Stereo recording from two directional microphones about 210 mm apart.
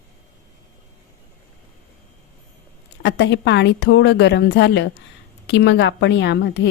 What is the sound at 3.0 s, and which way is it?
A woman's voice, 55° left (ahead or behind).